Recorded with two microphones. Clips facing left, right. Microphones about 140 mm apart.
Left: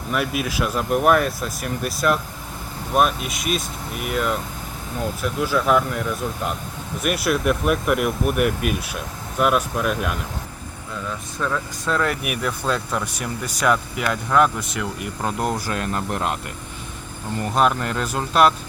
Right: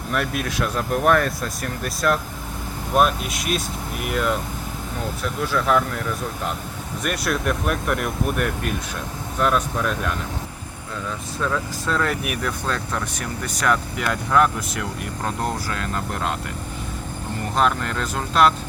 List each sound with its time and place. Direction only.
0.1 s speech: 5° left (ahead or behind)
11.3 s speech: centre (ahead or behind)
15.2 s speech: 15° left (ahead or behind)
17.5 s speech: 10° left (ahead or behind)